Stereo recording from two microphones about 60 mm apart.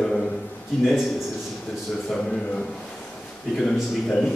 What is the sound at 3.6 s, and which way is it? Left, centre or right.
Speech, centre.